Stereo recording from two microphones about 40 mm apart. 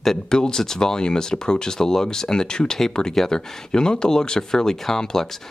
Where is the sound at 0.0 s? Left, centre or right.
Centre.